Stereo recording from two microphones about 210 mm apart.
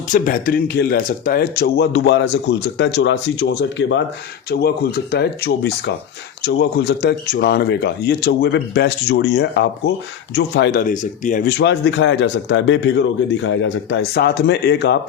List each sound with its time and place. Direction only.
0.1 s speech: 40° left (ahead or behind); by 4.0 s 60° left (ahead or behind)
4.4 s speech: 50° left (ahead or behind)
11.4 s a man's voice: 55° left (ahead or behind)